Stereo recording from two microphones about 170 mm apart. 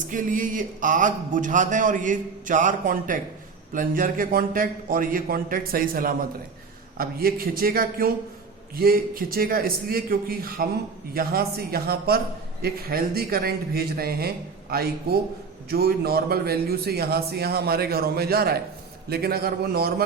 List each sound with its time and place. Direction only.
0.1 s a man's voice: 50° right (ahead or behind)